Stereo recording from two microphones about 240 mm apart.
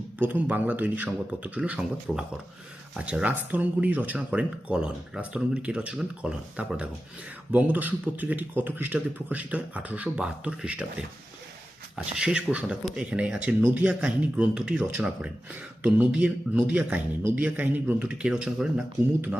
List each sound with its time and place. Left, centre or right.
0.2 s speech: centre
11.9 s speech: centre